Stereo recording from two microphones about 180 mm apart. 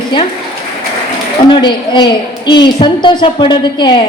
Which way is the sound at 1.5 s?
25° left (ahead or behind).